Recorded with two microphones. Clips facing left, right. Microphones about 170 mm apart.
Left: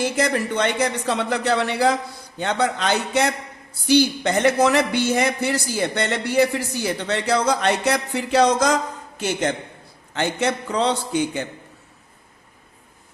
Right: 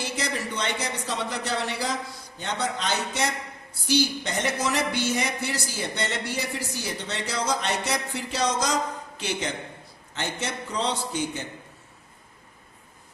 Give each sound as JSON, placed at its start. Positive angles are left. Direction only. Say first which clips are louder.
{"t": 0.0, "sound": "speech", "louder": "left 9 dB", "side_deg": 50}
{"t": 10.2, "sound": "speech", "louder": "left 9 dB", "side_deg": 65}